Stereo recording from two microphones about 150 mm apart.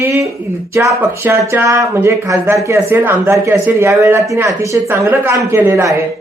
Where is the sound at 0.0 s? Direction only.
20° right (ahead or behind).